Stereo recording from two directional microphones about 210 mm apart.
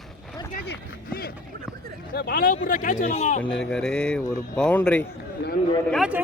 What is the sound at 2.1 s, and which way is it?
Speech, 45° left (ahead or behind).